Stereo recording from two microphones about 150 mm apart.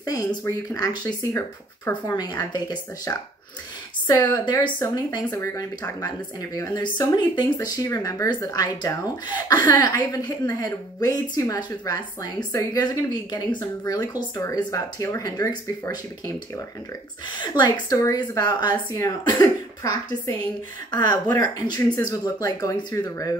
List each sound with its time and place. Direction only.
0.0 s speech: 25° left (ahead or behind)
17.4 s speech: 30° left (ahead or behind)
21.4 s speech: 25° left (ahead or behind)